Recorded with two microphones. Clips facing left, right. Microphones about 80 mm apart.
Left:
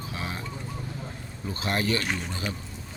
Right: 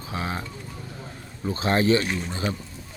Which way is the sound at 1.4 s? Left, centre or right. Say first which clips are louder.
Right 6 dB; right.